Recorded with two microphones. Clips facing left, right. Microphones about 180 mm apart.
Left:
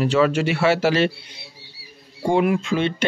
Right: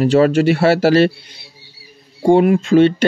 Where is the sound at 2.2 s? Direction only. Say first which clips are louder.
Right 7 dB; 35° right (ahead or behind).